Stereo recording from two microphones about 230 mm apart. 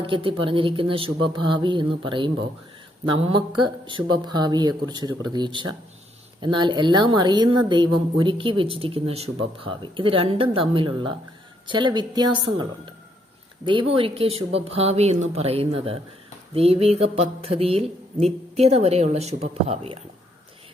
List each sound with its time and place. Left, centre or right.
0.0 s speech: right